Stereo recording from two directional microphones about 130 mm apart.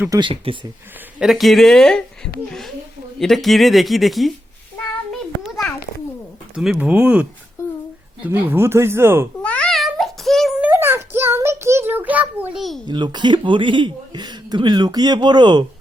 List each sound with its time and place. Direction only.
0.1 s speech: 40° right (ahead or behind)
1.2 s a woman's voice: centre (ahead or behind)
6.6 s speech: 5° right (ahead or behind)
9.4 s child singing: 10° left (ahead or behind)
10.6 s child singing: 15° right (ahead or behind)
12.9 s speech: 35° right (ahead or behind)